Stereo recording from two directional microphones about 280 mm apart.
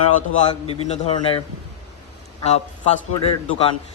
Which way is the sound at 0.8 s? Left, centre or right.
Left.